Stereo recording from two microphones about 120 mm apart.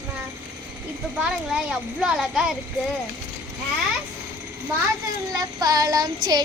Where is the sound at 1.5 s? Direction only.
5° right (ahead or behind).